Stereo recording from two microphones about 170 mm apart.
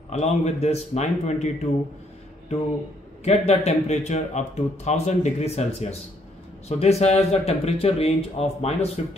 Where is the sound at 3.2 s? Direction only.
40° left (ahead or behind).